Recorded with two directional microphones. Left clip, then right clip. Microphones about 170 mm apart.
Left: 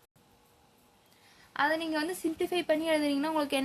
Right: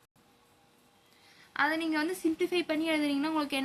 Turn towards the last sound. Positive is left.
turn(degrees=55)  # may be behind; listen again after turning